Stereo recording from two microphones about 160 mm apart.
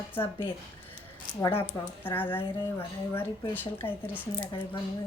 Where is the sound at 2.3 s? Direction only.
15° left (ahead or behind).